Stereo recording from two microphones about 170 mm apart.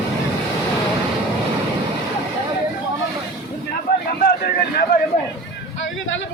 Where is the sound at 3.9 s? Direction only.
65° left (ahead or behind).